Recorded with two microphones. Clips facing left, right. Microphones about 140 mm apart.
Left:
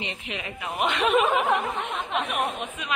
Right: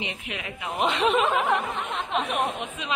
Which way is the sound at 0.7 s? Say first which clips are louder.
Right 1 dB; 30° right (ahead or behind).